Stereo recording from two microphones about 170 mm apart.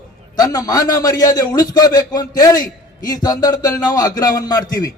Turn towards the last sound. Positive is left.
turn(degrees=20)  # may be behind; listen again after turning